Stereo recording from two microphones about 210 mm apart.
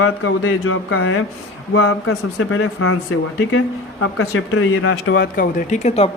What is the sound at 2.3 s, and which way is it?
Speech, 70° left (ahead or behind).